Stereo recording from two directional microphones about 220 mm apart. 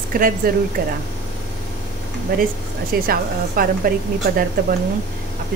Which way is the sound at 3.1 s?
40° right (ahead or behind).